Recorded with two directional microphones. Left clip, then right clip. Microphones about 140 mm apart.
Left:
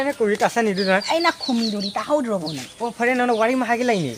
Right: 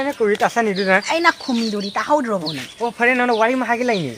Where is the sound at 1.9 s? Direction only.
10° right (ahead or behind).